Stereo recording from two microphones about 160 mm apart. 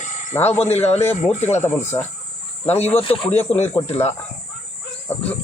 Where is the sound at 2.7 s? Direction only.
40° left (ahead or behind).